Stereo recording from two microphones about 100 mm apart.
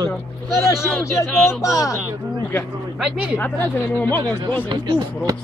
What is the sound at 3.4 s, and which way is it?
Speech, 20° left (ahead or behind).